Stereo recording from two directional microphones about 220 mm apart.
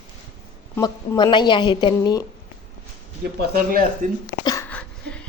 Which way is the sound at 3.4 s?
40° right (ahead or behind).